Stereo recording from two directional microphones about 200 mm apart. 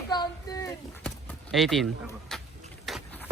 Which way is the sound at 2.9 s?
Centre (ahead or behind).